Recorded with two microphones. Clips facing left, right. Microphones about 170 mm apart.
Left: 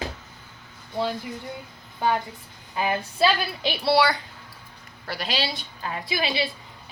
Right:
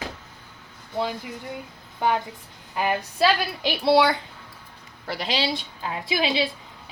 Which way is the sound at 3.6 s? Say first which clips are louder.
Right 2 dB; 20° right (ahead or behind).